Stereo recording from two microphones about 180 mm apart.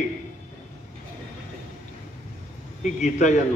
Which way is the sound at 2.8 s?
40° left (ahead or behind).